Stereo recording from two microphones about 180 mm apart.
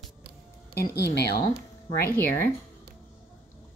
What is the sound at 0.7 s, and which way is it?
Speech, 65° left (ahead or behind).